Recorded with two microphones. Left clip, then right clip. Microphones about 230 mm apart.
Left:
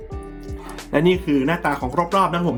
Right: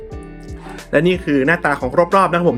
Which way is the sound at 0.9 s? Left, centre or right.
Centre.